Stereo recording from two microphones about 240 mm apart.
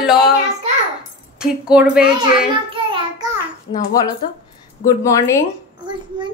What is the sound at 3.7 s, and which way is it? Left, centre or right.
Speech, centre.